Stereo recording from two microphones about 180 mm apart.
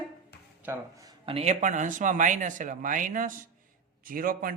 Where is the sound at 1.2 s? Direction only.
35° right (ahead or behind); by 4.5 s 55° right (ahead or behind).